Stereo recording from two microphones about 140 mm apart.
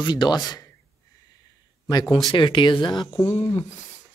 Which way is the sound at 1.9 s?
30° left (ahead or behind).